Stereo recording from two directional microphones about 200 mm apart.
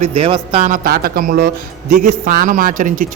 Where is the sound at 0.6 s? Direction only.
45° right (ahead or behind).